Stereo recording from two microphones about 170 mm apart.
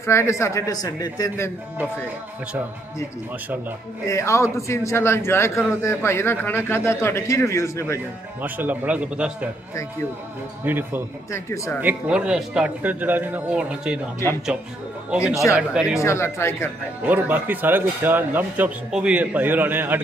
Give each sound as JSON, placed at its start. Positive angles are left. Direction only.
{"t": 0.0, "sound": "a man's voice", "side_deg": 15}
{"t": 4.1, "sound": "a man's voice", "side_deg": 15}
{"t": 8.4, "sound": "a man's voice", "side_deg": -10}
{"t": 10.6, "sound": "a man's voice", "side_deg": -10}
{"t": 11.3, "sound": "speech", "side_deg": 20}
{"t": 11.8, "sound": "a man's voice", "side_deg": -10}
{"t": 15.0, "sound": "a man's voice", "side_deg": -5}
{"t": 16.0, "sound": "a man's voice", "side_deg": 15}
{"t": 17.0, "sound": "a man's voice", "side_deg": -10}